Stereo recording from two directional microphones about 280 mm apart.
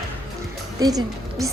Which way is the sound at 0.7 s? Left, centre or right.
Centre.